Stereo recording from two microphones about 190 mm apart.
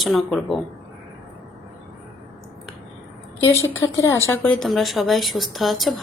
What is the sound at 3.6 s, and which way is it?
Speech, 90° left.